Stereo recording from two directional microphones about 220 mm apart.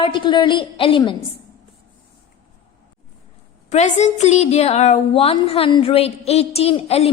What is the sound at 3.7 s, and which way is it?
A woman's voice, 30° left (ahead or behind).